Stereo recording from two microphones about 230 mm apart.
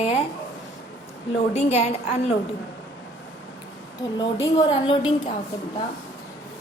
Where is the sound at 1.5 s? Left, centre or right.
Left.